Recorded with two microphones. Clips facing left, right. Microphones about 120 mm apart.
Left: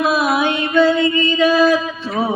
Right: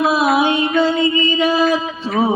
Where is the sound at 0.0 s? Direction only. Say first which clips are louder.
Right 2 dB; 25° right (ahead or behind).